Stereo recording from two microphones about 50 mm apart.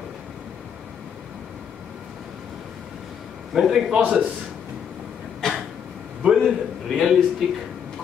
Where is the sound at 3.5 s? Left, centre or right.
Centre.